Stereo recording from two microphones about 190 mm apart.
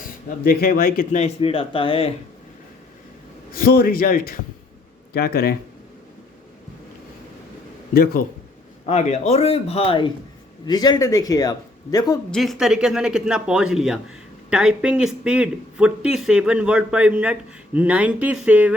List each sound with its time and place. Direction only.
0.0 s speech: 50° left (ahead or behind); by 2.1 s 30° left (ahead or behind)
3.5 s a man's voice: 50° left (ahead or behind)
7.9 s a man's voice: 50° left (ahead or behind)
8.9 s a man's voice: 35° left (ahead or behind); by 12.2 s 20° left (ahead or behind)
12.3 s speech: centre (ahead or behind)